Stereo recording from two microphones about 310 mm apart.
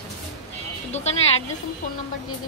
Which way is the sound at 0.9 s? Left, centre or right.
Left.